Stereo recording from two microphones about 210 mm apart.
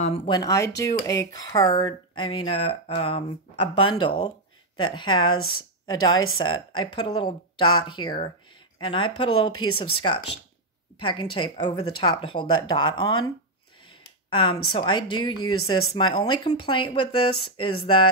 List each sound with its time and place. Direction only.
0.0 s speech: 25° left (ahead or behind)
14.3 s speech: 25° left (ahead or behind)